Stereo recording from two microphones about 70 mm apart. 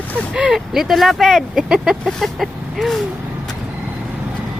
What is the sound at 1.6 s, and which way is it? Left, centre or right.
Speech, centre.